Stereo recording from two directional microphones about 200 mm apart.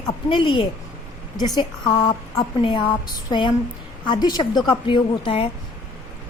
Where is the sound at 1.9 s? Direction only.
20° left (ahead or behind).